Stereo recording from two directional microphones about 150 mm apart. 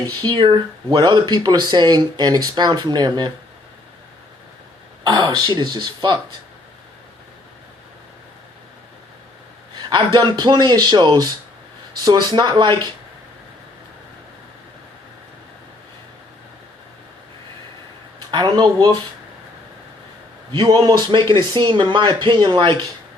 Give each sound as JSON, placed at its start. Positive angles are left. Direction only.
{"t": 0.2, "sound": "speech", "side_deg": -30}
{"t": 5.0, "sound": "speech", "side_deg": -30}
{"t": 9.9, "sound": "speech", "side_deg": -30}
{"t": 18.3, "sound": "speech", "side_deg": -25}
{"t": 20.5, "sound": "a woman's voice", "side_deg": -30}